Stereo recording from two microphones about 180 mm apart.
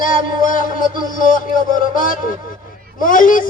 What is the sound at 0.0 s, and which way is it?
Speech, 50° left (ahead or behind).